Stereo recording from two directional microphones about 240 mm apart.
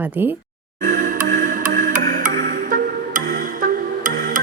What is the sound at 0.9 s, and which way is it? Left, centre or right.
Music, right.